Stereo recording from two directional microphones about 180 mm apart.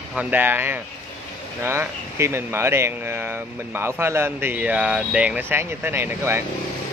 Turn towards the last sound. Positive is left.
turn(degrees=-15)  # may be behind; listen again after turning